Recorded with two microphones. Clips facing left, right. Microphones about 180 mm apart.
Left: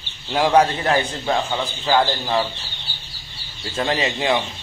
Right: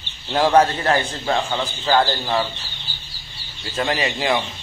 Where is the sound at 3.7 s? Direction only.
25° left (ahead or behind).